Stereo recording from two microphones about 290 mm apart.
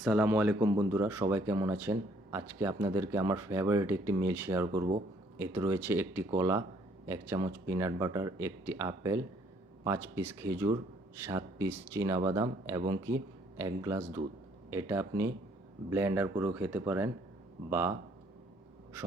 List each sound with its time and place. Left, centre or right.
0.0 s speech: centre
19.0 s speech: centre